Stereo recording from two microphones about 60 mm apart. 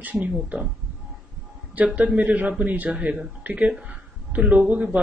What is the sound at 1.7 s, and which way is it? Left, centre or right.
Speech, right.